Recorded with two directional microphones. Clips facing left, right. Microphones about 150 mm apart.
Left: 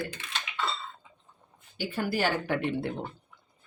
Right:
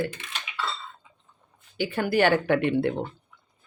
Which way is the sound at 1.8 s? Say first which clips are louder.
Right 6 dB; 65° right (ahead or behind).